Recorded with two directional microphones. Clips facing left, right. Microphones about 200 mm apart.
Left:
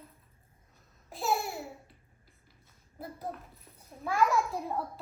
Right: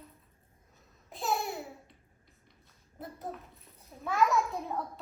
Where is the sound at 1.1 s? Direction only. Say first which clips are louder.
Left 1 dB; centre (ahead or behind).